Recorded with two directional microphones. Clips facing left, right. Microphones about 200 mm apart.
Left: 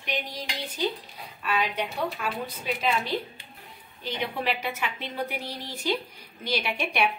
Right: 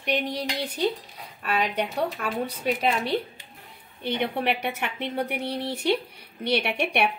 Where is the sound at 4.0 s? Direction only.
65° right (ahead or behind).